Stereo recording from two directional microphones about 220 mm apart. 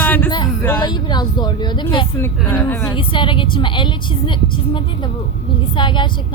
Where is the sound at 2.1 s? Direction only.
10° left (ahead or behind).